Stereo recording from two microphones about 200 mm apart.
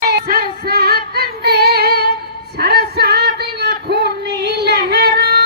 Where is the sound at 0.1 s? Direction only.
50° right (ahead or behind).